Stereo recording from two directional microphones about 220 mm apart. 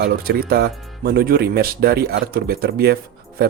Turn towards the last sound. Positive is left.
turn(degrees=-45)  # may be behind; listen again after turning